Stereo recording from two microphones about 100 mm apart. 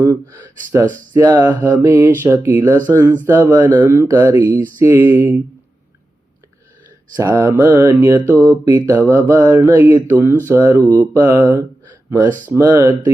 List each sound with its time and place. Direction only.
0.0 s speech: 35° right (ahead or behind)
0.3 s speech: 25° right (ahead or behind)
7.2 s speech: 30° right (ahead or behind)
7.6 s mantra: 20° right (ahead or behind)
8.0 s speech: 25° right (ahead or behind)
8.6 s speech: 35° right (ahead or behind)
9.0 s speech: 20° right (ahead or behind)